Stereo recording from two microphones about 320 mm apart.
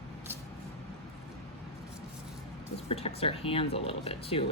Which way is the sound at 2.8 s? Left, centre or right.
Centre.